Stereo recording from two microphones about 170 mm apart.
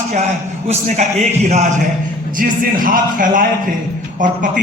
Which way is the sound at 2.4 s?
55° right (ahead or behind).